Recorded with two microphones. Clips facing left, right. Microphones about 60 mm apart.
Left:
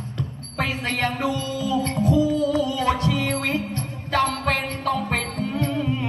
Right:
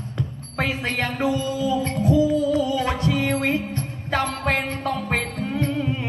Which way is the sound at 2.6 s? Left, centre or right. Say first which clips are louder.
Even; right.